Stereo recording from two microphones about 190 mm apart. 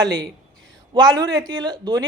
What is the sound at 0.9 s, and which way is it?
Speech, 25° right (ahead or behind).